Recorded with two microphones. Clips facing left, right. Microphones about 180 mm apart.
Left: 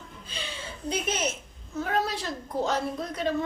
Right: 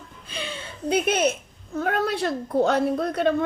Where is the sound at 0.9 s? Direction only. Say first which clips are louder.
Right 8 dB; 60° right (ahead or behind).